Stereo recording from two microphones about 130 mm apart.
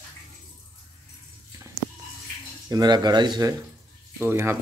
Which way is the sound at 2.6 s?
30° right (ahead or behind).